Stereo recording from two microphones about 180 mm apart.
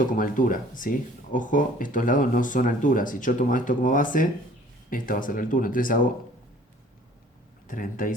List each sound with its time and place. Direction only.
0.0 s speech: 50° left (ahead or behind)
7.7 s speech: 50° left (ahead or behind)